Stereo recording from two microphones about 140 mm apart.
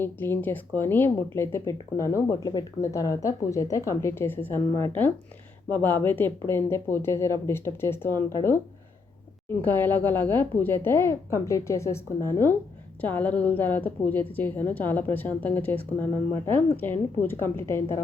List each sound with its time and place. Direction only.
0.0 s speech: 15° left (ahead or behind)
9.6 s speech: 15° left (ahead or behind)